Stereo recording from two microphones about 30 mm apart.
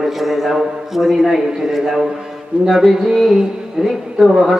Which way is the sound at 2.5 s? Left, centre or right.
Right.